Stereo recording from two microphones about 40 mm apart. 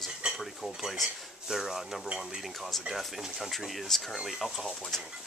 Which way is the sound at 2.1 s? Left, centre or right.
Centre.